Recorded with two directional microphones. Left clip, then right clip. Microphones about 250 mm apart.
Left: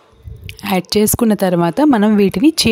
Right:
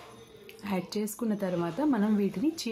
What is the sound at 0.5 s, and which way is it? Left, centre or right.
Speech, left.